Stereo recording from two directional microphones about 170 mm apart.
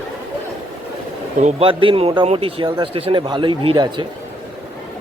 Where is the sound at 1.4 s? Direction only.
35° right (ahead or behind).